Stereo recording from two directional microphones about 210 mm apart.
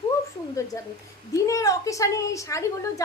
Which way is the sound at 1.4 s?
15° left (ahead or behind).